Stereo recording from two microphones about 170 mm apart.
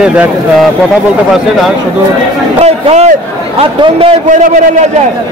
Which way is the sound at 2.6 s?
40° right (ahead or behind).